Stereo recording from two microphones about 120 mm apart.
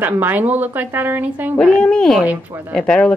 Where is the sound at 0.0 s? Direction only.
15° right (ahead or behind).